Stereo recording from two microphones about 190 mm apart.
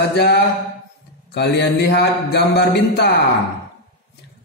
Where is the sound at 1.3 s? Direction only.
60° left (ahead or behind).